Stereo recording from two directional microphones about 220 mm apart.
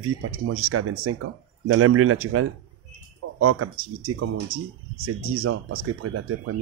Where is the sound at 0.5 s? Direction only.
80° right.